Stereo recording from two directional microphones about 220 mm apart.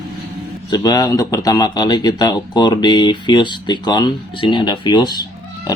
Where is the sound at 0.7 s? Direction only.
20° left (ahead or behind).